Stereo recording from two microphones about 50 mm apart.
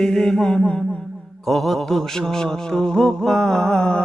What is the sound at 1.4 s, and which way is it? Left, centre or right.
Music, centre.